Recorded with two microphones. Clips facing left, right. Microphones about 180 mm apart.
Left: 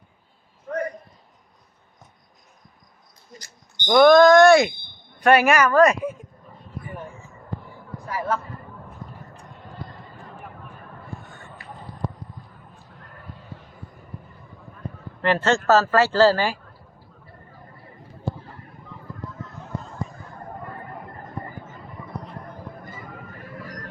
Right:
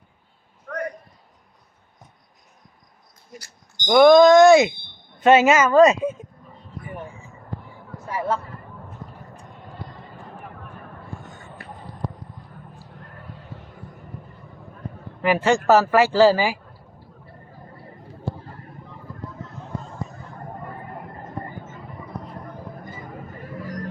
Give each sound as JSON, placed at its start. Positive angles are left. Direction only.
{"t": 3.8, "sound": "speech", "side_deg": -15}
{"t": 8.0, "sound": "a sound", "side_deg": -25}
{"t": 15.2, "sound": "speech", "side_deg": -10}